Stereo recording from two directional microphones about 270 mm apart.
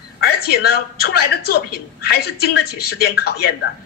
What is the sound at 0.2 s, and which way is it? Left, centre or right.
A man's voice, left.